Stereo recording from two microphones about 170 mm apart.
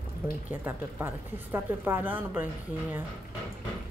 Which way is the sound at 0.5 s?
10° right (ahead or behind).